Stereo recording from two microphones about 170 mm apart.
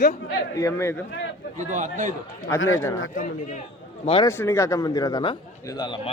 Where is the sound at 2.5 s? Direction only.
15° left (ahead or behind).